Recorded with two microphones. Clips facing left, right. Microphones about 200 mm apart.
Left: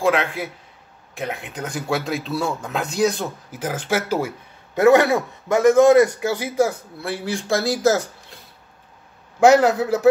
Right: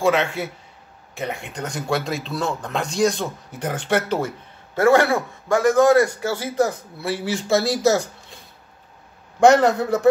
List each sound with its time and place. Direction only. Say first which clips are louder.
0.0 s speech: even; centre (ahead or behind)
4.7 s a man's voice: left 2 dB; 20° left (ahead or behind)
7.0 s speech: right 3 dB; centre (ahead or behind)
9.4 s speech: left 1 dB; 5° left (ahead or behind)